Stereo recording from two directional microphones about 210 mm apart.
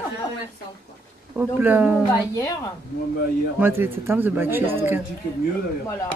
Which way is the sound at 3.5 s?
10° right (ahead or behind).